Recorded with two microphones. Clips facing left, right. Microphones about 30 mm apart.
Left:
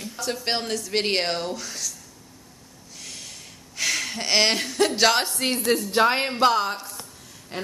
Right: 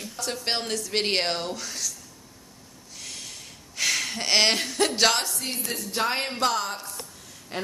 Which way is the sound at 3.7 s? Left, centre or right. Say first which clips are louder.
Even; centre.